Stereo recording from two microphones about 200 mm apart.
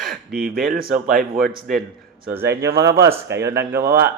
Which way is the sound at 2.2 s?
10° right (ahead or behind).